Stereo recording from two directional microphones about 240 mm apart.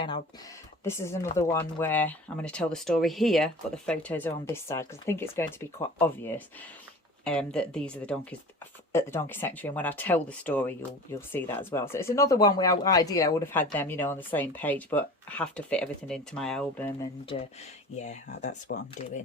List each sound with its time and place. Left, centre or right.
0.9 s speech: centre
17.9 s speech: left
18.7 s speech: left